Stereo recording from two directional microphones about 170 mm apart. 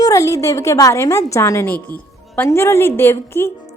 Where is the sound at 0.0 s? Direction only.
20° left (ahead or behind).